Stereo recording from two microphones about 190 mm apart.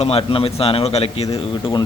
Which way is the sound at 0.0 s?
30° left (ahead or behind).